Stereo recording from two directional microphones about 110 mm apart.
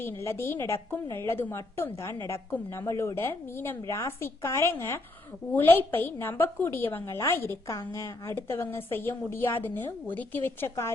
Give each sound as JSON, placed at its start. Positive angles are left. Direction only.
{"t": 0.0, "sound": "a woman's voice", "side_deg": 25}